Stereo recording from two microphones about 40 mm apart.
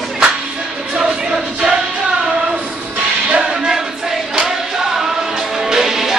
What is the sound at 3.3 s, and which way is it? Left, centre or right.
Music, right.